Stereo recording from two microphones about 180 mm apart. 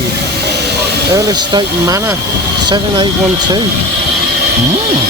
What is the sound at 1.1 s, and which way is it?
Speech, 20° right (ahead or behind).